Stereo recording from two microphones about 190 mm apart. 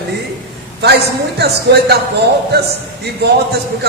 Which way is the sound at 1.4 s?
60° right (ahead or behind).